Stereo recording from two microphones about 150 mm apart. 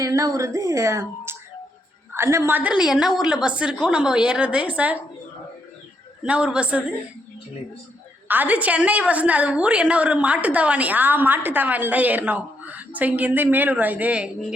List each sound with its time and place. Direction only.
0.0 s a woman's voice: 20° right (ahead or behind)
6.2 s a woman's voice: 10° right (ahead or behind)
8.3 s a woman's voice: 10° right (ahead or behind)